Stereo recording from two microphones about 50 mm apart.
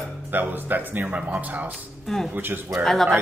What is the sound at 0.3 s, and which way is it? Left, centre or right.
Speech, right.